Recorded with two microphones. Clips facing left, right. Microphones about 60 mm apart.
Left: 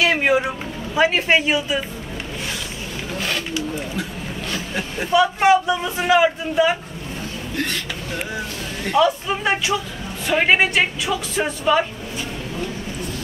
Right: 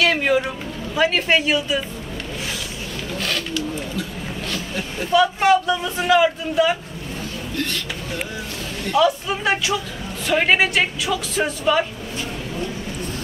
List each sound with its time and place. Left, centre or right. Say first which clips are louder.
0.0 s vehicle: left 1 dB; centre
0.9 s a man's voice: left 1 dB; centre
3.2 s a sound: even; centre
4.5 s a man's voice: left 2 dB; centre
8.9 s speech: even; centre